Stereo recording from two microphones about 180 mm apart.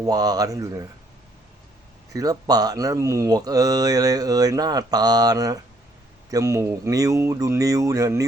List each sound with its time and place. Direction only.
0.0 s speech: 20° right (ahead or behind)
2.1 s speech: 20° right (ahead or behind)